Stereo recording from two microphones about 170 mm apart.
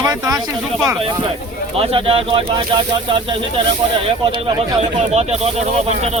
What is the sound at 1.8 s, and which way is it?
Speech, 35° right (ahead or behind).